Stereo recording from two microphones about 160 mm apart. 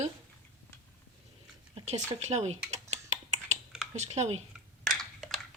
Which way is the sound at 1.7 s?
45° right (ahead or behind).